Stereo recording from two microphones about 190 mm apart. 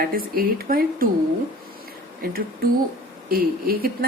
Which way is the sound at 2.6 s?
50° right (ahead or behind).